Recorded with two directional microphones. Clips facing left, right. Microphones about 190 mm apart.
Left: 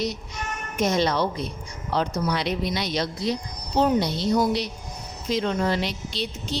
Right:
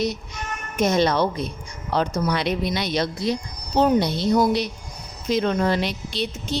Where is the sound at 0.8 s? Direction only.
55° right (ahead or behind).